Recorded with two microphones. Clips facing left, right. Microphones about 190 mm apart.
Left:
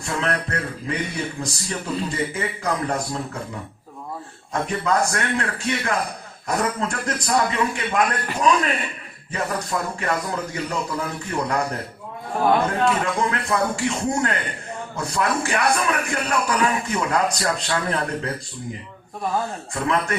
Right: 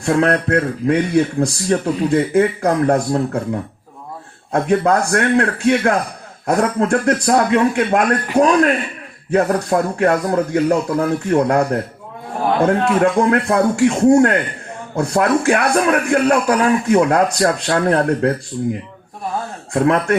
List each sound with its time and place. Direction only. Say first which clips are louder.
0.0 s speech: right 10 dB; 55° right (ahead or behind)
4.5 s speech: right 7 dB; 55° right (ahead or behind)
19.7 s speech: right 9 dB; 55° right (ahead or behind)